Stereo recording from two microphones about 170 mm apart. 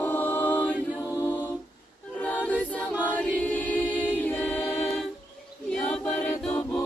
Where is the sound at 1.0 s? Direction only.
15° left (ahead or behind).